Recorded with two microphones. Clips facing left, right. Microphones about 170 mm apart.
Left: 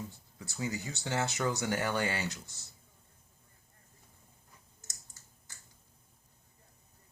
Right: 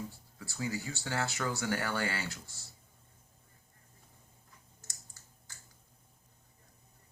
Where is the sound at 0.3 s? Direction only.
20° left (ahead or behind).